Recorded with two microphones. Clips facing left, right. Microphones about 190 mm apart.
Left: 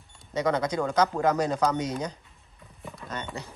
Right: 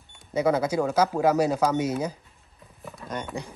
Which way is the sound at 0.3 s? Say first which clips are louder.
Right 3 dB; 5° right (ahead or behind).